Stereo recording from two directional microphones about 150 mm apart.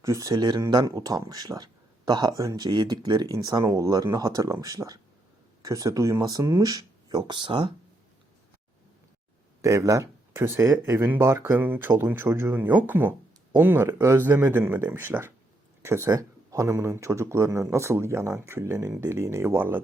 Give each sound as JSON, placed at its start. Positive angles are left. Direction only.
{"t": 0.0, "sound": "speech", "side_deg": -20}
{"t": 9.6, "sound": "speech", "side_deg": -20}